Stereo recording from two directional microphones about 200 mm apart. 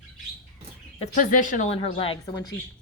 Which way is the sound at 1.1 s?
40° left (ahead or behind).